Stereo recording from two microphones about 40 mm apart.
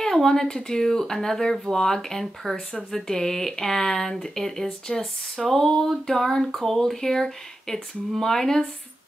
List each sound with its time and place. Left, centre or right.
0.0 s speech: centre